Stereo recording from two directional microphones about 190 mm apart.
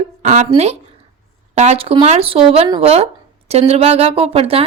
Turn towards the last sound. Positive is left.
turn(degrees=-30)  # may be behind; listen again after turning